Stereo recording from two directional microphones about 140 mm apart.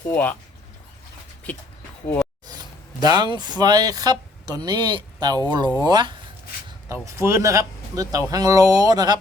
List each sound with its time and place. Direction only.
0.1 s speech: 10° left (ahead or behind)
2.5 s speech: 30° right (ahead or behind)
6.8 s speech: 20° right (ahead or behind)